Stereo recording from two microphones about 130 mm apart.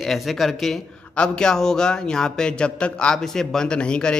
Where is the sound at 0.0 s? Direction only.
Centre (ahead or behind).